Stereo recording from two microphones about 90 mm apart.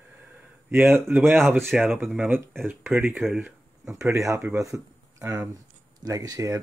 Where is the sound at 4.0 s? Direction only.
35° right (ahead or behind).